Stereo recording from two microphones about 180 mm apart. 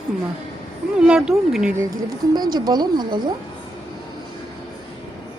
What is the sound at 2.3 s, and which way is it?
Speech, 20° right (ahead or behind).